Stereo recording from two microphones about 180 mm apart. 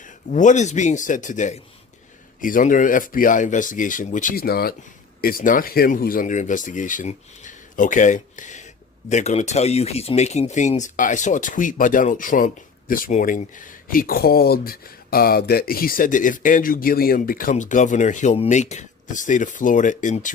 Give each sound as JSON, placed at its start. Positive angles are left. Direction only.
{"t": 0.0, "sound": "speech", "side_deg": 45}